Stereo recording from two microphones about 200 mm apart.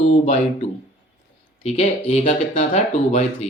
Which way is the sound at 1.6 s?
35° left (ahead or behind).